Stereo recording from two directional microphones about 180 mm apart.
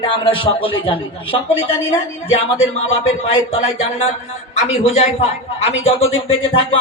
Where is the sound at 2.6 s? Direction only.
90° left.